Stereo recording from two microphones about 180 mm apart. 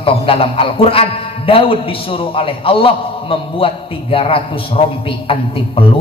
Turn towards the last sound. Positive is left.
turn(degrees=30)  # may be behind; listen again after turning